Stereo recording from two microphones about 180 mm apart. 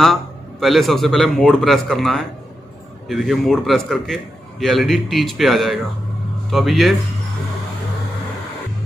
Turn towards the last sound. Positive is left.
turn(degrees=0)  # may be behind; listen again after turning